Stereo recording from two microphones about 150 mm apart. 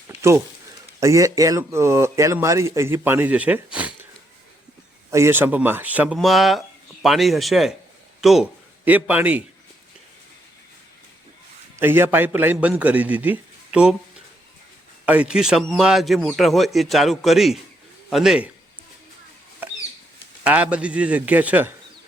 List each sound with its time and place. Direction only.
0.1 s a sound: 20° right (ahead or behind)
0.9 s speech: 20° right (ahead or behind)
5.1 s a man's voice: 15° right (ahead or behind)
11.8 s speech: 15° right (ahead or behind)
15.0 s a man's voice: 10° right (ahead or behind)
20.4 s speech: 10° right (ahead or behind)